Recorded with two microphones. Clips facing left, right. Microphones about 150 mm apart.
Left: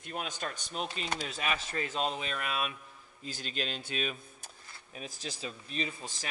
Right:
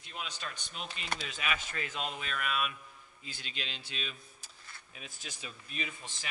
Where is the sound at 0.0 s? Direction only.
50° left (ahead or behind).